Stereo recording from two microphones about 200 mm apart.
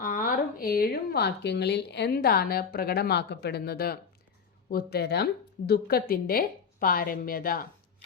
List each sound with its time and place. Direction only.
0.0 s a woman's voice: 45° left (ahead or behind)